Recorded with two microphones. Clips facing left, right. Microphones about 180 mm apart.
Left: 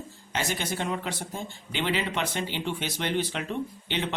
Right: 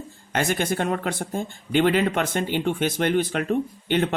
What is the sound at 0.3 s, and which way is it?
Speech, 55° right (ahead or behind).